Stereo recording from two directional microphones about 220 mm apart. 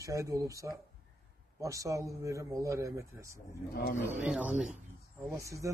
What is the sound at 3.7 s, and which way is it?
Speech, 45° left (ahead or behind).